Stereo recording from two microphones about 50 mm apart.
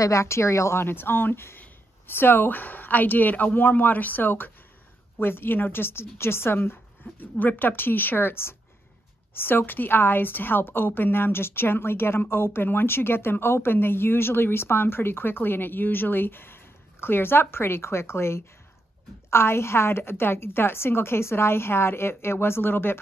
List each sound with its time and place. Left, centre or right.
0.0 s speech: left
0.8 s a woman's voice: left